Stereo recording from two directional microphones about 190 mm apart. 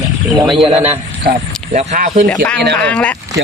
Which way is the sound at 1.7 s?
40° right (ahead or behind).